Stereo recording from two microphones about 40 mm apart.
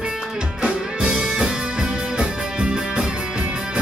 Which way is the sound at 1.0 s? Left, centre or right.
Centre.